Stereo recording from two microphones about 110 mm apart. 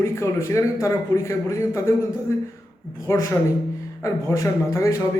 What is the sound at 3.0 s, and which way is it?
A man's voice, 25° left (ahead or behind).